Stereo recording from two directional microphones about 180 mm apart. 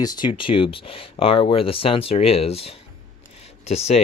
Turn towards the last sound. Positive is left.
turn(degrees=35)  # may be behind; listen again after turning